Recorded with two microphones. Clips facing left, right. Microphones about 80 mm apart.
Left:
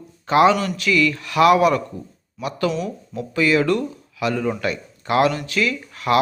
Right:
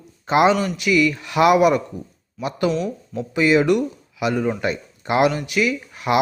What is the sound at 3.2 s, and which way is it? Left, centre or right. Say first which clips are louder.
Speech: right 1 dB; right.